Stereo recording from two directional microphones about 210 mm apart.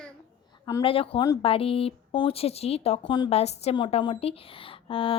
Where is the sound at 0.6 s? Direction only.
20° left (ahead or behind).